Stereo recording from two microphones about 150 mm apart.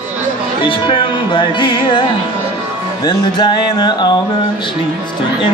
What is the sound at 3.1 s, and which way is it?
Music, 30° left (ahead or behind).